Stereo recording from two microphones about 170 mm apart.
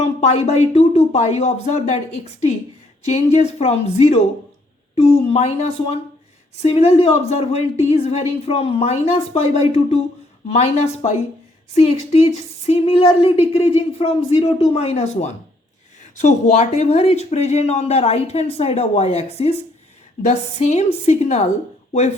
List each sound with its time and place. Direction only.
0.0 s speech: 40° left (ahead or behind)